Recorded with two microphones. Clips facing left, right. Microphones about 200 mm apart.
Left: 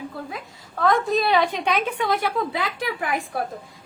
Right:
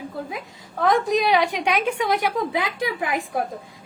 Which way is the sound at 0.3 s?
15° right (ahead or behind).